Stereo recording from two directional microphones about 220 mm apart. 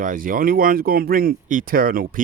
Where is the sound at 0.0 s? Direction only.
40° right (ahead or behind).